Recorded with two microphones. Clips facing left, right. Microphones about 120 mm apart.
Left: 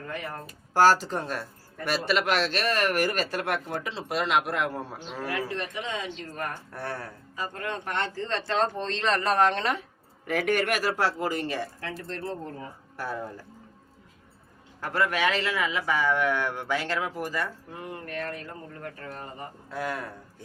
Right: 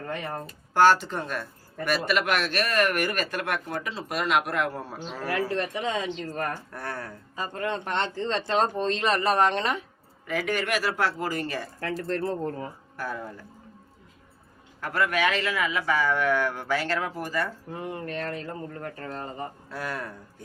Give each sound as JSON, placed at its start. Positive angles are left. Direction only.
{"t": 0.1, "sound": "speech", "side_deg": -25}
{"t": 0.7, "sound": "speech", "side_deg": 35}
{"t": 5.3, "sound": "speech", "side_deg": -35}
{"t": 6.7, "sound": "speech", "side_deg": 25}
{"t": 7.3, "sound": "speech", "side_deg": -25}
{"t": 10.2, "sound": "speech", "side_deg": 60}
{"t": 11.8, "sound": "speech", "side_deg": -45}
{"t": 13.0, "sound": "speech", "side_deg": 25}
{"t": 14.8, "sound": "speech", "side_deg": 30}
{"t": 17.7, "sound": "speech", "side_deg": -25}
{"t": 19.7, "sound": "speech", "side_deg": 20}